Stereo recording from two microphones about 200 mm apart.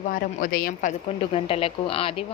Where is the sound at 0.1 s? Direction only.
45° left (ahead or behind).